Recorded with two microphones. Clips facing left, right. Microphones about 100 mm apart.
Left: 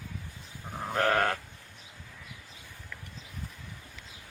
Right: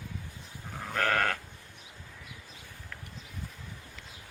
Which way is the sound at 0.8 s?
25° left (ahead or behind).